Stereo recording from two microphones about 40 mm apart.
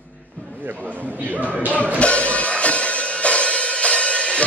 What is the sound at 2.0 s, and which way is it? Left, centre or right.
Music, left.